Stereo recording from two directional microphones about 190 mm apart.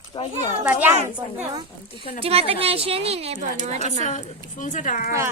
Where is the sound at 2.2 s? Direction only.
30° right (ahead or behind).